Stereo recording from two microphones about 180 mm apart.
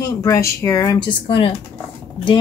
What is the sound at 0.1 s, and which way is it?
Speech, 20° left (ahead or behind).